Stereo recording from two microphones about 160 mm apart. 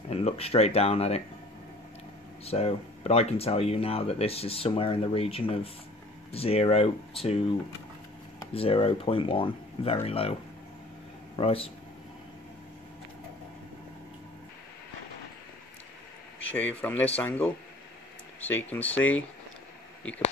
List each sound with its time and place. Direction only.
0.1 s speech: 40° left (ahead or behind)
2.4 s speech: 40° left (ahead or behind)
8.5 s speech: 35° left (ahead or behind)
11.3 s speech: 35° left (ahead or behind)
16.5 s speech: 10° left (ahead or behind)
18.5 s speech: 10° left (ahead or behind)